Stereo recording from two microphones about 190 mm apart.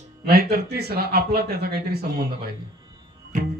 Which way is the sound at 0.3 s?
60° right (ahead or behind).